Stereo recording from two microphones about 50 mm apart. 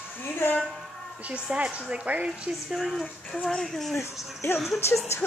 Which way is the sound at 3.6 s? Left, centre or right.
Centre.